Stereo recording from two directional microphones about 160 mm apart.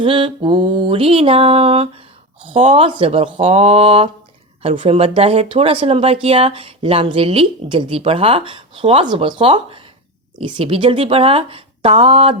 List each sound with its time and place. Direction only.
0.0 s speech: 30° right (ahead or behind)